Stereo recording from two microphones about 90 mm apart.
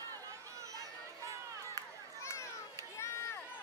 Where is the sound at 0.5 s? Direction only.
40° right (ahead or behind).